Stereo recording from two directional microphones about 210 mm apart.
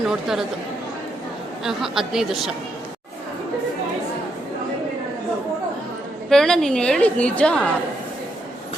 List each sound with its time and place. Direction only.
0.1 s a woman's voice: centre (ahead or behind)
1.6 s a woman's voice: centre (ahead or behind)
6.2 s a woman's voice: centre (ahead or behind)